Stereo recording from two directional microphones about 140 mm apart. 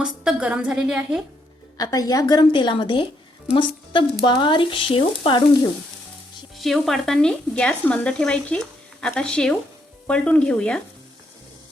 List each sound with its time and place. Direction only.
0.0 s speech: 5° right (ahead or behind)
1.8 s speech: 25° left (ahead or behind)
6.6 s speech: centre (ahead or behind)